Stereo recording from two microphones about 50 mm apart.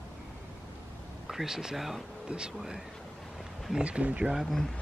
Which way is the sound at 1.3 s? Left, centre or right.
Centre.